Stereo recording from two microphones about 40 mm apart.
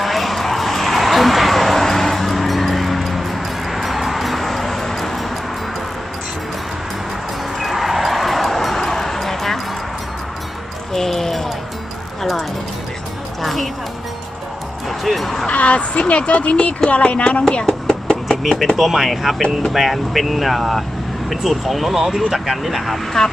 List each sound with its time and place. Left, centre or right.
0.0 s vehicle: centre
7.6 s a sound: centre
10.9 s basketball bounce: centre
12.2 s music: centre
14.8 s music: centre
15.4 s a sound: left
16.9 s speech: left
17.7 s knock: centre
18.8 s speech: centre
23.2 s speech: centre